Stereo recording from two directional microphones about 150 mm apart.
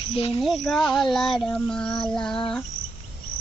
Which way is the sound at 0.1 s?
40° left (ahead or behind).